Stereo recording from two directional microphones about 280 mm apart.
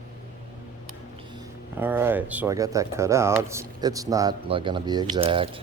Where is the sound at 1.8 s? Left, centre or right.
Centre.